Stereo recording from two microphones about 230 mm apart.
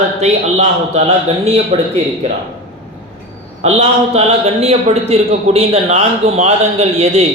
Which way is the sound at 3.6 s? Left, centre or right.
Right.